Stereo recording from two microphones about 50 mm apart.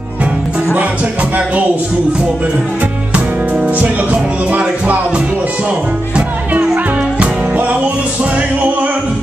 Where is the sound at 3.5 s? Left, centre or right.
Right.